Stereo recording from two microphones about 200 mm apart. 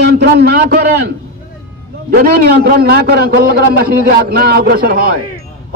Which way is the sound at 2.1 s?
50° right (ahead or behind).